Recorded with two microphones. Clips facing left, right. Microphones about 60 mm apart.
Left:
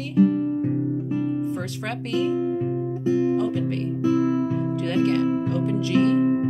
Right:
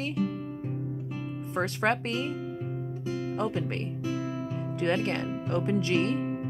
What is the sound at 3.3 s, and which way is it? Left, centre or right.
Speech, right.